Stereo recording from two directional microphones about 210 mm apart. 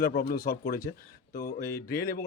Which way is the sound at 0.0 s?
45° left (ahead or behind).